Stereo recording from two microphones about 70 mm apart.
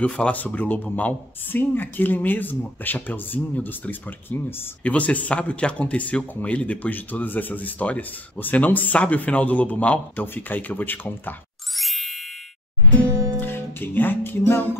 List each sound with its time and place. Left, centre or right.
0.0 s speech: centre
4.8 s speech: left
11.7 s ding: centre
13.4 s music: left